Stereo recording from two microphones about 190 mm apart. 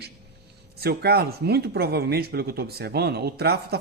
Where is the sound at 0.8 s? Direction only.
55° right (ahead or behind).